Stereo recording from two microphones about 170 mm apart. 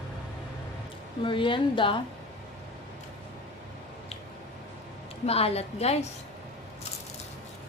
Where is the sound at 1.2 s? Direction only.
30° left (ahead or behind).